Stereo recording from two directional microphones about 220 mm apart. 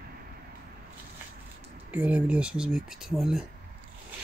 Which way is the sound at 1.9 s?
5° right (ahead or behind).